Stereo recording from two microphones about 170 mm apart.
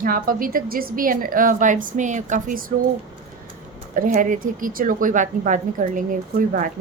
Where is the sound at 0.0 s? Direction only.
55° right (ahead or behind).